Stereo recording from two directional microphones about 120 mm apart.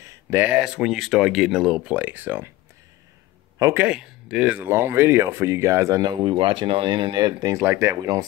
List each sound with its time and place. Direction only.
0.0 s a sound: 25° right (ahead or behind)
0.5 s speech: 5° right (ahead or behind)
3.7 s speech: 10° right (ahead or behind); by 6.0 s 25° right (ahead or behind)
6.0 s speech: 45° right (ahead or behind)
7.5 s speech: 20° right (ahead or behind)